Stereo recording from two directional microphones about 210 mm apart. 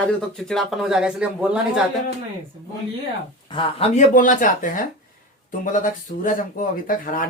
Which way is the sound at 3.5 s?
25° left (ahead or behind).